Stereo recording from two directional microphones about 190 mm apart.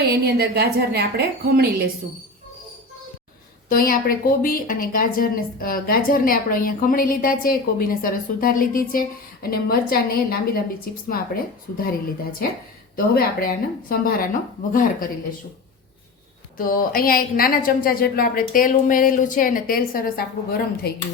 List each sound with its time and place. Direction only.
0.1 s a woman's voice: 60° right (ahead or behind)
3.7 s a woman's voice: 50° left (ahead or behind)
16.6 s a woman's voice: 50° left (ahead or behind)